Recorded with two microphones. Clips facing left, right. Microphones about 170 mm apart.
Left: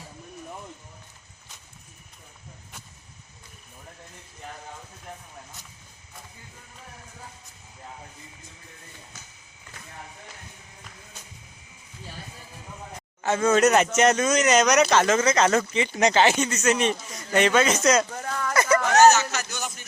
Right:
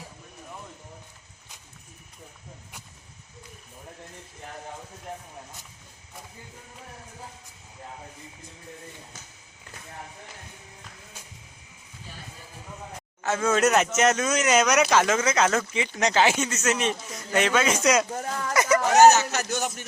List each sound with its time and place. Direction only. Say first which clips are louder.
13.2 s speech: left 3 dB; 5° right (ahead or behind)
19.1 s a man's voice: right 2 dB; 40° right (ahead or behind)